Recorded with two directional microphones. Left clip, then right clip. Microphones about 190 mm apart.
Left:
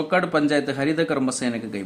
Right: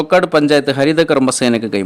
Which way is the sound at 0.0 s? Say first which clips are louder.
Right 9 dB; 50° right (ahead or behind).